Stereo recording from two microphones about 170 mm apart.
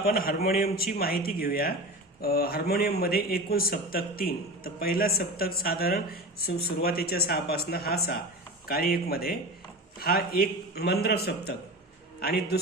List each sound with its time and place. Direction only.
0.0 s a man's voice: 60° left (ahead or behind)